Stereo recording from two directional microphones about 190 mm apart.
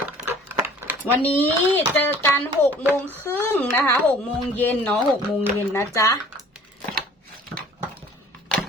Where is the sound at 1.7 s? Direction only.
10° left (ahead or behind).